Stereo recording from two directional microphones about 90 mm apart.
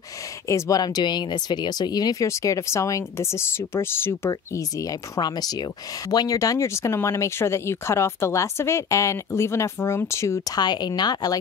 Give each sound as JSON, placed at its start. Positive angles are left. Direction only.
{"t": 0.5, "sound": "speech", "side_deg": 40}
{"t": 10.5, "sound": "speech", "side_deg": 50}